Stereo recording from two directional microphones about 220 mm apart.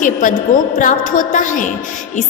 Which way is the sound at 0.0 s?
35° left (ahead or behind).